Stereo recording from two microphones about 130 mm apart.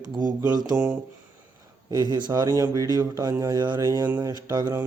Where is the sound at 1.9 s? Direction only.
35° right (ahead or behind).